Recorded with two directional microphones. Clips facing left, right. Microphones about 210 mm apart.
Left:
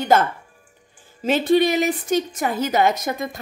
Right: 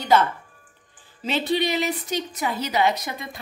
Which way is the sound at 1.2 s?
50° left (ahead or behind).